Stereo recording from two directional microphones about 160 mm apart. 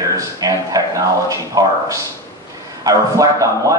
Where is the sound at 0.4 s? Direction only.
20° right (ahead or behind).